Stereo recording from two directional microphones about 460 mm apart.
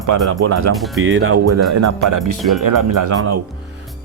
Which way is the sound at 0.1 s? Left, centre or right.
Right.